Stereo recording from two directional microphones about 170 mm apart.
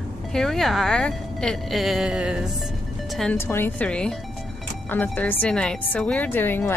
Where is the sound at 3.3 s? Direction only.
15° left (ahead or behind).